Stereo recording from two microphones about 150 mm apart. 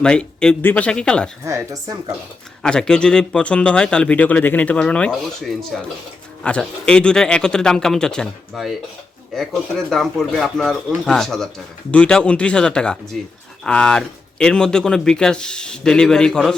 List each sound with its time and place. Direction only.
0.0 s speech: 5° left (ahead or behind)
1.5 s speech: 20° right (ahead or behind)
2.6 s speech: 5° left (ahead or behind)